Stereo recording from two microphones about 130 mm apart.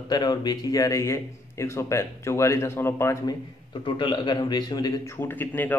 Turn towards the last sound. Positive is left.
turn(degrees=15)  # may be behind; listen again after turning